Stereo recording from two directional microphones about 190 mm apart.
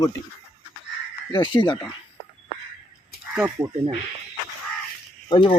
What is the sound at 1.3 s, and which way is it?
Speech, 25° left (ahead or behind).